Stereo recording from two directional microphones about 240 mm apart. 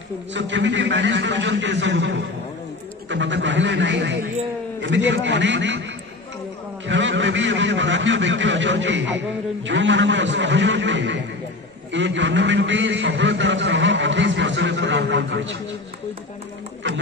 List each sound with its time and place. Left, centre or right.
0.3 s a man's voice: right
6.9 s a man's voice: right